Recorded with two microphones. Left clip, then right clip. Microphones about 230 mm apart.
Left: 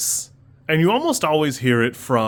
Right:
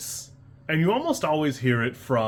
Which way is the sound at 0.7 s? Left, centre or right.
Left.